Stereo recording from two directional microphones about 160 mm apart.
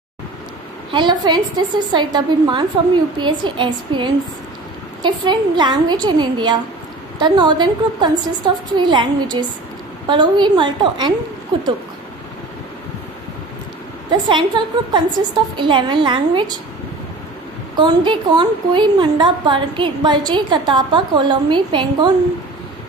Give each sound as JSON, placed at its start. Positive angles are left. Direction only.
{"t": 0.9, "sound": "a woman's voice", "side_deg": -25}
{"t": 14.3, "sound": "a woman's voice", "side_deg": -30}
{"t": 17.7, "sound": "a woman's voice", "side_deg": -30}